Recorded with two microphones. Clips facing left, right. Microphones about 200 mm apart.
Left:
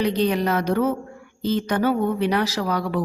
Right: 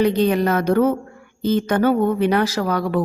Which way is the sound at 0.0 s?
50° right (ahead or behind).